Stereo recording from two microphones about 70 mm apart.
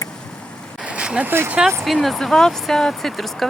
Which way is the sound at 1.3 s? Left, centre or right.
Right.